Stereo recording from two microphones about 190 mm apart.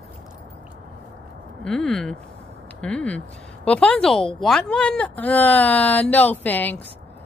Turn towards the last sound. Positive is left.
turn(degrees=10)  # may be behind; listen again after turning